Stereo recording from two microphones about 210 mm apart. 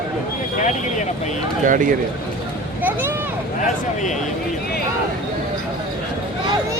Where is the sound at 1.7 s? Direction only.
40° right (ahead or behind).